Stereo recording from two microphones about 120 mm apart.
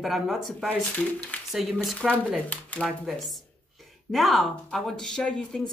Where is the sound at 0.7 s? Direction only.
10° left (ahead or behind).